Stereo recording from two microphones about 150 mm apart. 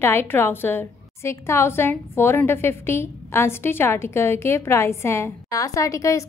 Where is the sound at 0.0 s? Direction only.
15° left (ahead or behind).